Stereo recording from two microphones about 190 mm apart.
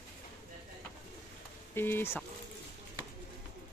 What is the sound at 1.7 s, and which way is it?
Speech, 10° left (ahead or behind).